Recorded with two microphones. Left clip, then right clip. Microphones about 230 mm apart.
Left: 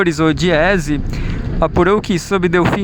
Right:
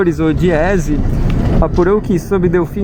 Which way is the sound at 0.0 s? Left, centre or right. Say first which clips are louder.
Right 1 dB; left.